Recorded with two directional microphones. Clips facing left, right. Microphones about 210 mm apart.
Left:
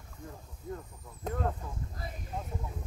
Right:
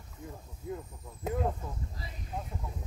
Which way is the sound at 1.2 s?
10° right (ahead or behind).